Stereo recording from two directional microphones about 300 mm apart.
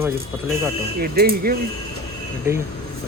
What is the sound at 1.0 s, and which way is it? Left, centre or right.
Speech, right.